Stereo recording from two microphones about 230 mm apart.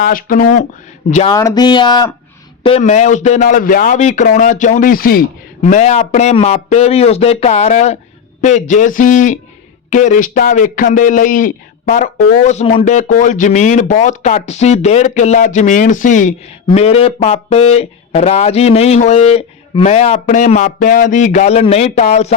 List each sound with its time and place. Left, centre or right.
0.0 s a man's voice: left
1.3 s speech: centre
2.6 s a man's voice: left
5.6 s a man's voice: left